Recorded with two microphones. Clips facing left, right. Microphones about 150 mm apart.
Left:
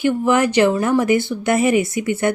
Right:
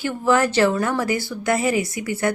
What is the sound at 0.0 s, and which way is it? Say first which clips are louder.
A woman's voice: left 3 dB; 15° left (ahead or behind).